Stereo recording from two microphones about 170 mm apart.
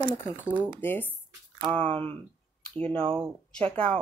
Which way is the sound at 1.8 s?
30° right (ahead or behind).